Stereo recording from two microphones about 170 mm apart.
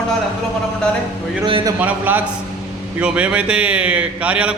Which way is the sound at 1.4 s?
30° right (ahead or behind).